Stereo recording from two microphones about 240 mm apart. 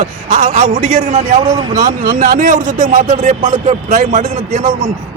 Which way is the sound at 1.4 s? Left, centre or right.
Centre.